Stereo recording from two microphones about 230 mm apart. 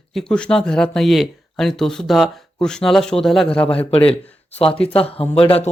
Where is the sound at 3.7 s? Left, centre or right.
Left.